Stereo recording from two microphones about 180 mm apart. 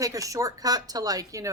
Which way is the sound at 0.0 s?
20° right (ahead or behind).